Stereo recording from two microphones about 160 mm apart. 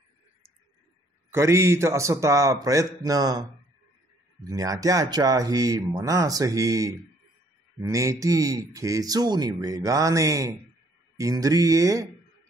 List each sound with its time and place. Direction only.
1.3 s speech: 15° right (ahead or behind)
4.5 s speech: 20° right (ahead or behind)